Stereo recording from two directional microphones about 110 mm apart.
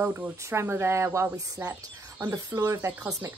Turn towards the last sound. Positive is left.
turn(degrees=-25)  # may be behind; listen again after turning